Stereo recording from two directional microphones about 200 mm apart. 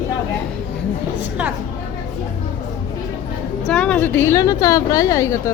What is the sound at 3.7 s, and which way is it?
A woman's voice, 5° left (ahead or behind).